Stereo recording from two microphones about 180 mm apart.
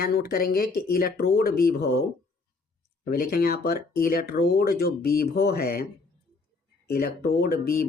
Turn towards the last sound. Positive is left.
turn(degrees=55)  # may be behind; listen again after turning